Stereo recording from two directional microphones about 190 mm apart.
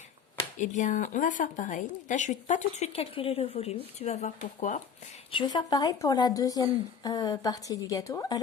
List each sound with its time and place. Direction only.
0.6 s speech: 40° left (ahead or behind)
5.3 s a woman's voice: 25° left (ahead or behind)